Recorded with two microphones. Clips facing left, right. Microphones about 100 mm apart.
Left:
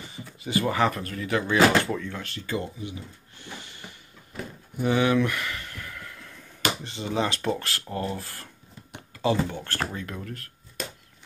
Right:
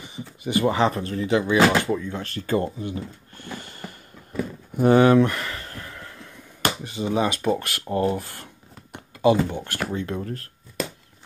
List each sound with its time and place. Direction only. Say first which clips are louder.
0.1 s speech: right 3 dB; 20° right (ahead or behind)
2.1 s speech: right 7 dB; 40° right (ahead or behind)
4.7 s a sound: right 7 dB; 40° right (ahead or behind)
6.8 s speech: right 4 dB; 15° right (ahead or behind)
9.9 s speech: right 7 dB; 30° right (ahead or behind)